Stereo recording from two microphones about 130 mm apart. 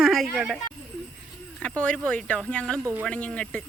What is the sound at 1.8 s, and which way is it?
Speech, 10° left (ahead or behind).